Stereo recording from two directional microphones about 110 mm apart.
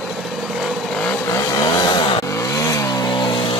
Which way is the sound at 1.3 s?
35° left (ahead or behind).